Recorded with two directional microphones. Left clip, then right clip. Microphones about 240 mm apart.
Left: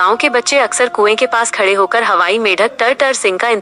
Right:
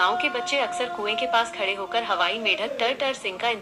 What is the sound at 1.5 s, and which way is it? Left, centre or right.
Speech, left.